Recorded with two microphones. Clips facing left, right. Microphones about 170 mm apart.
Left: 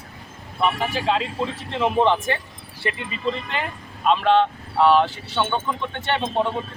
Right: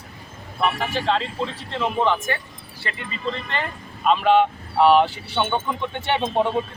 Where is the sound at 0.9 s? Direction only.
10° left (ahead or behind).